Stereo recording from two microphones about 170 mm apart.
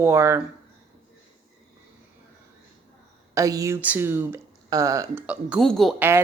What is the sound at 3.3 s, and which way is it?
Speech, 20° right (ahead or behind).